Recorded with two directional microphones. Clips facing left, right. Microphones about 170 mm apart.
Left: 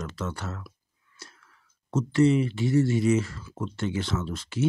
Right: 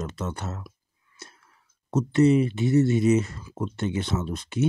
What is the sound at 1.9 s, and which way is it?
Speech, 20° right (ahead or behind).